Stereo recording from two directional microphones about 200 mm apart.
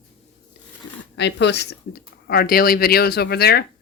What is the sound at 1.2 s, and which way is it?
A woman's voice, 60° left (ahead or behind).